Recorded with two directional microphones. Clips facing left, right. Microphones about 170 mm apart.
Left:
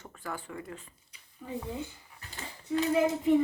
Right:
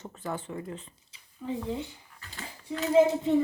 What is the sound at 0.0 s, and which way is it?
Speech, 25° right (ahead or behind).